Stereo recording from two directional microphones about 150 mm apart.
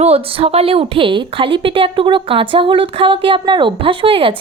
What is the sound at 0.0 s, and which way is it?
A woman's voice, 40° right (ahead or behind).